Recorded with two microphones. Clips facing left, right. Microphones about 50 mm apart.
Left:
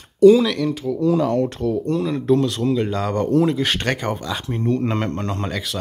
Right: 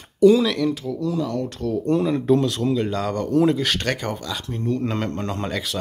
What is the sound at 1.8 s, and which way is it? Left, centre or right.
Speech, centre.